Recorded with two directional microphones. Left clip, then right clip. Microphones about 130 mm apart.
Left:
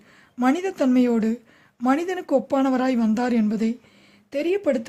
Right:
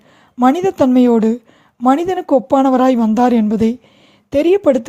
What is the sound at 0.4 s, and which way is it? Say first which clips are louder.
A woman's voice: right 9 dB; 40° right (ahead or behind).